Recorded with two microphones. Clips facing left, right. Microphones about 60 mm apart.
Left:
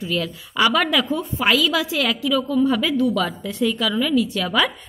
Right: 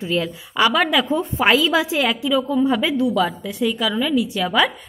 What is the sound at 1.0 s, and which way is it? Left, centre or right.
A woman's voice, right.